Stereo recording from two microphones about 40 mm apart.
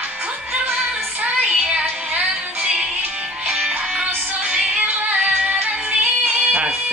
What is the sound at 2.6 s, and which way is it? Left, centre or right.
Music, right.